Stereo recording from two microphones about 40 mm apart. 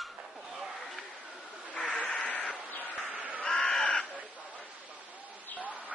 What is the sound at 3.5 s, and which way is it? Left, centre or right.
Crow, left.